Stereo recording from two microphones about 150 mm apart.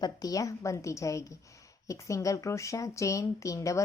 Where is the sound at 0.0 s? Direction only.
25° left (ahead or behind).